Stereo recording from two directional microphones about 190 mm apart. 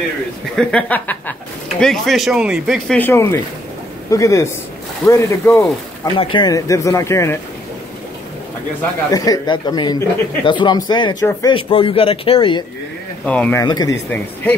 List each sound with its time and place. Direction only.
0.6 s speech: 5° left (ahead or behind)
3.0 s speech: 15° left (ahead or behind)
9.1 s a man's voice: 20° left (ahead or behind)
13.2 s speech: 5° left (ahead or behind)
13.7 s a man's voice: 20° left (ahead or behind)